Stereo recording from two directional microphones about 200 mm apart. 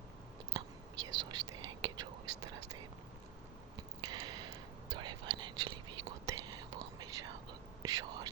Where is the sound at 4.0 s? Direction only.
20° right (ahead or behind).